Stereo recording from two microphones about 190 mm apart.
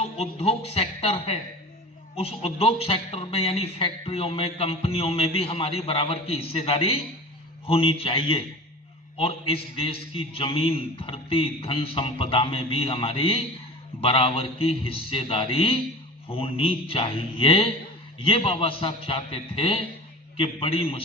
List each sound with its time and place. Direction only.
0.0 s a man's voice: 35° left (ahead or behind)